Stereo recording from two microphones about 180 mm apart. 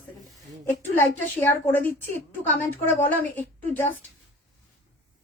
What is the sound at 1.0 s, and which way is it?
A woman's voice, 10° left (ahead or behind).